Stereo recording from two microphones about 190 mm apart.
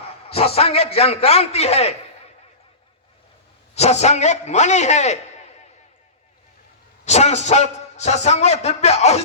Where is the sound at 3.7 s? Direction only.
35° left (ahead or behind).